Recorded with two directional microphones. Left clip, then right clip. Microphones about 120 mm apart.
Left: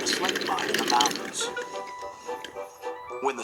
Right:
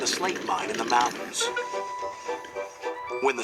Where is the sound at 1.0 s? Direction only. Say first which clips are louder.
Right 1 dB; 15° right (ahead or behind).